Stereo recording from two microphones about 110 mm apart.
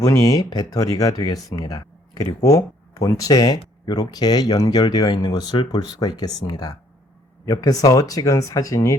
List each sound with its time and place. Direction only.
0.0 s speech: 30° left (ahead or behind)